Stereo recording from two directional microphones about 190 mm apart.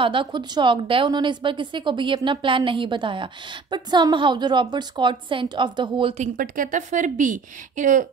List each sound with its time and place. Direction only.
0.0 s a woman's voice: 25° right (ahead or behind); by 8.1 s 40° right (ahead or behind)